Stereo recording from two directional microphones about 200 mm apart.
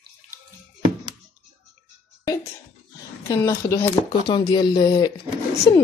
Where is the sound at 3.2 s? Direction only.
15° left (ahead or behind).